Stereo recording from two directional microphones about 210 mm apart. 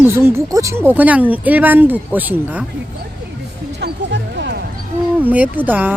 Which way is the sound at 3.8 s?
55° right (ahead or behind).